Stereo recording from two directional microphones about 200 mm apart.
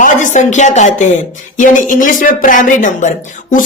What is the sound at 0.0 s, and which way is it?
Speech, 40° left (ahead or behind).